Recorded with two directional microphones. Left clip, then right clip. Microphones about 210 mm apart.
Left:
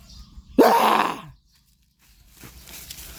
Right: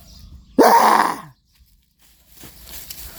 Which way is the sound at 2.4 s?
10° right (ahead or behind).